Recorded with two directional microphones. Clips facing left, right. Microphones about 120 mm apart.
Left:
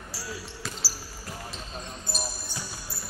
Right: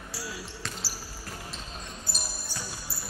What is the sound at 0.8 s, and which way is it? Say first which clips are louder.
Basketball bounce: left 1 dB; 5° left (ahead or behind).